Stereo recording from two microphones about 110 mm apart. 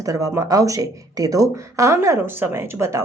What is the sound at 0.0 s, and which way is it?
Speech, 30° right (ahead or behind).